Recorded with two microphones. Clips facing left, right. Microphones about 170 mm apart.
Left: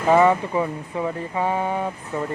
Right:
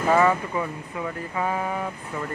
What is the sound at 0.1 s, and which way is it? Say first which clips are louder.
Speech: left 4 dB; 25° left (ahead or behind).